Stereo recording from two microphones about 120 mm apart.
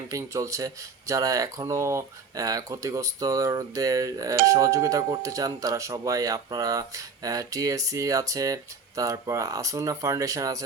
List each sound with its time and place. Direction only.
0.1 s speech: 25° right (ahead or behind)